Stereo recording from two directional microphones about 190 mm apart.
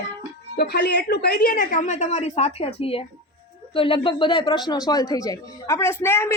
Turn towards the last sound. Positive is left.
turn(degrees=15)  # may be behind; listen again after turning